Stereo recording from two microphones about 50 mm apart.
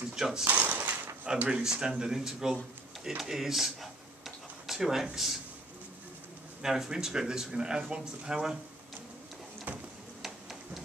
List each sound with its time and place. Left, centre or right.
0.1 s speech: centre
0.5 s dishes: right
1.5 s speech: centre
6.6 s speech: centre
9.7 s a sound: right
10.2 s tick-tock: centre